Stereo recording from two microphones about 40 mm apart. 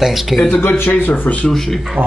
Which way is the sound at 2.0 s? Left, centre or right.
Right.